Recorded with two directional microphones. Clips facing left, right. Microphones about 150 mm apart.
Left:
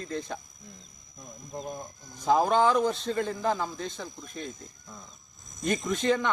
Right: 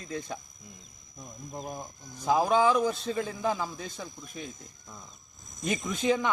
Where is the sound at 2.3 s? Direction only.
5° right (ahead or behind).